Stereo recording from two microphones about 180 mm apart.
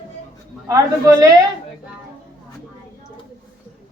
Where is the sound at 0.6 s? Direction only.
20° right (ahead or behind).